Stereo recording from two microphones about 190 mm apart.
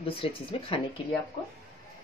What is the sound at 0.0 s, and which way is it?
Speech, 30° left (ahead or behind).